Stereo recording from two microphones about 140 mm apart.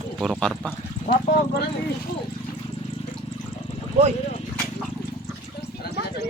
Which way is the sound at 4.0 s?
50° right (ahead or behind).